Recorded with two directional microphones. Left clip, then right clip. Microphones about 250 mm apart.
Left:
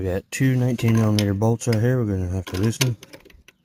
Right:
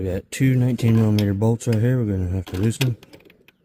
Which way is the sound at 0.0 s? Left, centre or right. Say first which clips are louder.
Even; centre.